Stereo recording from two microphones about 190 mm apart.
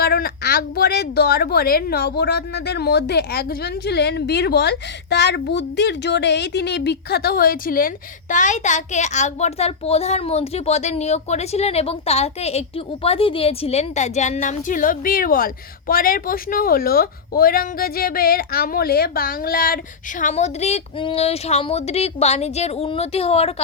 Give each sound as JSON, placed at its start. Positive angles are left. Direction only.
{"t": 0.0, "sound": "a woman's voice", "side_deg": 55}